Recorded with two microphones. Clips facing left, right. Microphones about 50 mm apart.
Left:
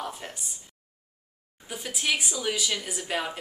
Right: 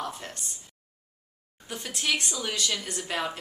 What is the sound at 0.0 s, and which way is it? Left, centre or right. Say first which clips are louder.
Speech: even; centre.